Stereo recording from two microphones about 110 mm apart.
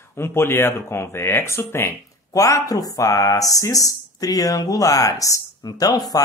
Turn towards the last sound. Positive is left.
turn(degrees=35)  # may be behind; listen again after turning